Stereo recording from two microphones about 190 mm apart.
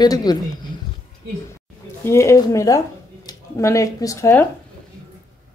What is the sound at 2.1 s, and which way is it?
A woman's voice, 15° left (ahead or behind).